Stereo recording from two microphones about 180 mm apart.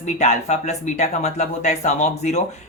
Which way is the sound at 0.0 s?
40° left (ahead or behind).